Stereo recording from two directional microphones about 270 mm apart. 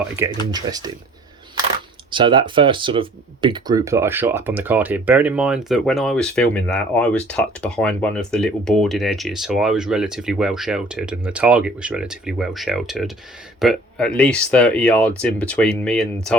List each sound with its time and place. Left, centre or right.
0.2 s speech: centre
2.0 s speech: centre